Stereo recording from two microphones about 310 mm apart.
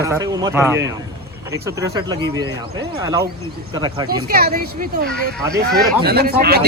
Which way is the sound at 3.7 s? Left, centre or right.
Centre.